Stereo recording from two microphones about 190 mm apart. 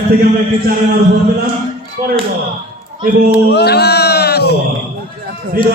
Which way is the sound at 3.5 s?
60° left (ahead or behind).